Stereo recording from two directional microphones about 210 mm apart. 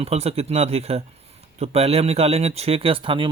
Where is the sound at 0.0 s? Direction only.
30° right (ahead or behind).